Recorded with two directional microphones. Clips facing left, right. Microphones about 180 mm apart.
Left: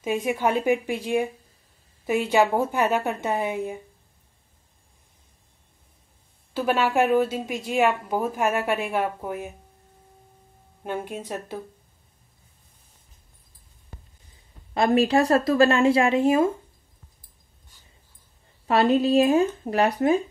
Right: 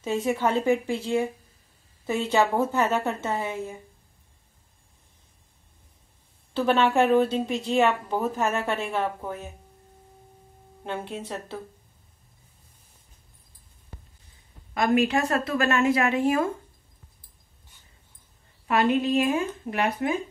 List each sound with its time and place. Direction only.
0.0 s a woman's voice: 15° left (ahead or behind)
6.5 s a woman's voice: 10° left (ahead or behind)
10.8 s a woman's voice: 10° left (ahead or behind)
14.7 s a woman's voice: 30° left (ahead or behind)
18.7 s a woman's voice: 35° left (ahead or behind)